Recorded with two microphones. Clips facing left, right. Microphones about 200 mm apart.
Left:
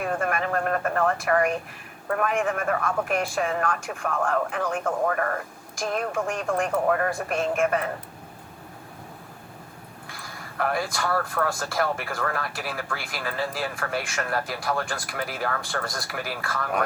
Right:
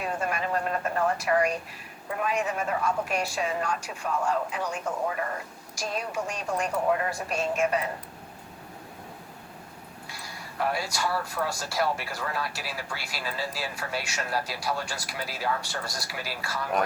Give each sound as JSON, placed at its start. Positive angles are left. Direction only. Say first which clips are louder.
{"t": 0.0, "sound": "speech", "louder": "left 4 dB", "side_deg": 55}
{"t": 10.1, "sound": "speech", "louder": "left 2 dB", "side_deg": 50}